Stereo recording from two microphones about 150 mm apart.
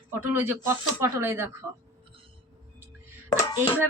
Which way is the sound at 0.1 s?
15° right (ahead or behind).